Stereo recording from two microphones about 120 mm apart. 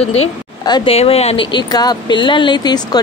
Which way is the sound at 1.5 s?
35° left (ahead or behind).